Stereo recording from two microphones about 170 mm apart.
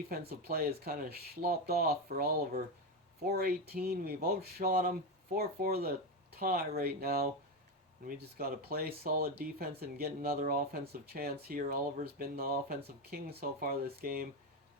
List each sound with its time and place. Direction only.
0.1 s speech: 65° right (ahead or behind)